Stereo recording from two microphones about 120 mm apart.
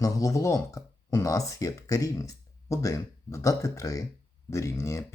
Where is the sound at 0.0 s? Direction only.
30° left (ahead or behind).